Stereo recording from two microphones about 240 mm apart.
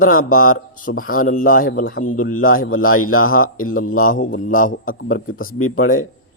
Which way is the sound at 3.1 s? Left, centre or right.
Left.